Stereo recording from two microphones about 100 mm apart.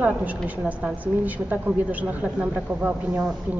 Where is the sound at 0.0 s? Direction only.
15° right (ahead or behind).